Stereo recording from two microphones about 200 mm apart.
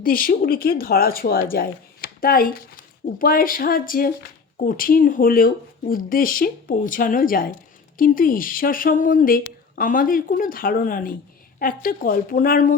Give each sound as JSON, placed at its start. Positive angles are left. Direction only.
{"t": 0.0, "sound": "speech", "side_deg": 45}